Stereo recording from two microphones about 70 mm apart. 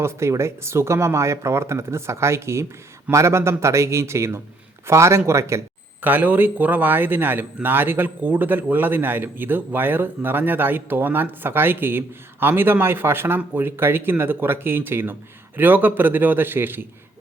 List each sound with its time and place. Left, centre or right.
0.0 s a man's voice: right
6.0 s speech: right